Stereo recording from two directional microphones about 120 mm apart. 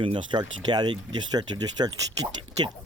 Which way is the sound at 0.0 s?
45° right (ahead or behind).